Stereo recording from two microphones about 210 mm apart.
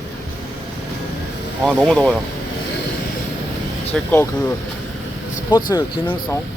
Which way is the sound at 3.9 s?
5° left (ahead or behind).